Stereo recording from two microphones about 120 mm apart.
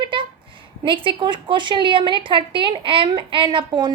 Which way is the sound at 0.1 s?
45° right (ahead or behind).